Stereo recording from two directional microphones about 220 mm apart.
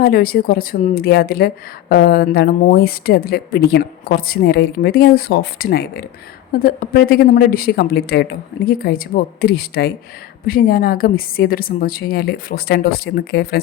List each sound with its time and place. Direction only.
0.0 s a woman's voice: 40° left (ahead or behind)